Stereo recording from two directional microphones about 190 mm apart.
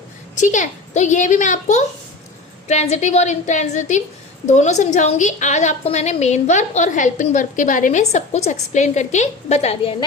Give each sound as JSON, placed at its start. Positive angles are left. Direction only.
{"t": 0.3, "sound": "a woman's voice", "side_deg": 40}